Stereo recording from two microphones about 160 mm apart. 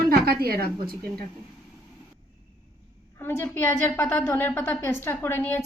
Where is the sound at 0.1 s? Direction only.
75° right (ahead or behind).